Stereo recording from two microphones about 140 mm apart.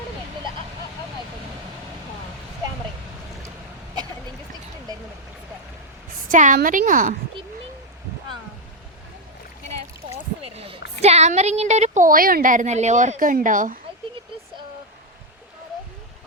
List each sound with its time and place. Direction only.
6.2 s a woman's voice: 70° right (ahead or behind)
10.1 s a woman's voice: 45° right (ahead or behind); by 13.7 s 70° right (ahead or behind)